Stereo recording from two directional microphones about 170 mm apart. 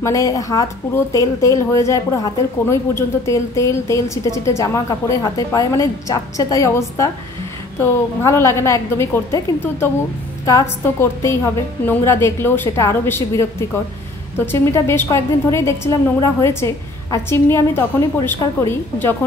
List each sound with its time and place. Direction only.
0.0 s speech: 20° left (ahead or behind)